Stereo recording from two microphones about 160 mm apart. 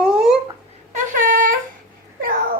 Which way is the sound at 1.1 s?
55° right (ahead or behind).